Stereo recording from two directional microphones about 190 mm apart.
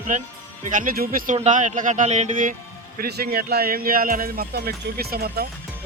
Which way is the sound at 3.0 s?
55° right (ahead or behind).